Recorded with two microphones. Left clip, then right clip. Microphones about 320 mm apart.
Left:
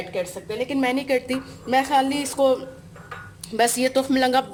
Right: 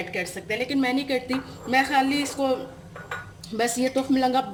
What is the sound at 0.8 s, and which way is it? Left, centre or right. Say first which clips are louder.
Speech: left 6 dB; centre.